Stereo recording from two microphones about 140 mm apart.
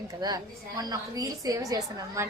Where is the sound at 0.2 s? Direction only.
30° right (ahead or behind).